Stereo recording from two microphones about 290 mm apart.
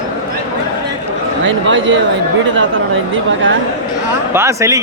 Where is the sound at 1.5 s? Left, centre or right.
Right.